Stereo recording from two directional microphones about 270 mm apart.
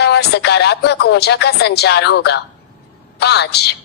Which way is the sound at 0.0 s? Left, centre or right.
Left.